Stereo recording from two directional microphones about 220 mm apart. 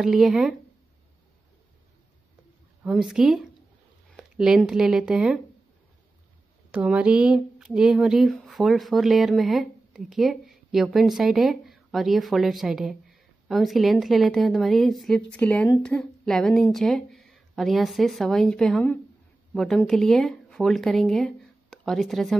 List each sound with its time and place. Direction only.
0.0 s speech: centre (ahead or behind)
2.8 s speech: centre (ahead or behind)
6.7 s speech: 5° right (ahead or behind)